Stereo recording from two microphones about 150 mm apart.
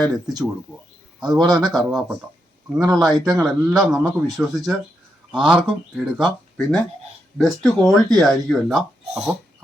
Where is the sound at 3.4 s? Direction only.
Centre (ahead or behind).